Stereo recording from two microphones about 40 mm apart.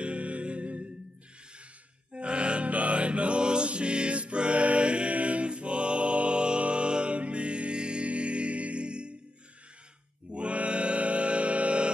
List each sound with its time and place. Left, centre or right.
0.0 s music: right
2.1 s music: right
10.3 s mantra: right